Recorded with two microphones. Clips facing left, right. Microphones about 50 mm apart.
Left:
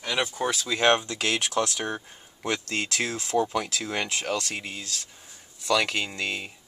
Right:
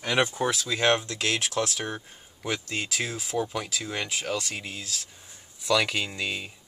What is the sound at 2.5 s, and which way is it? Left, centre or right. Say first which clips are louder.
Speech: left 2 dB; centre.